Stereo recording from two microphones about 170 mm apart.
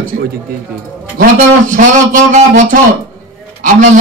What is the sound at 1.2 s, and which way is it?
A man's voice, 50° right (ahead or behind).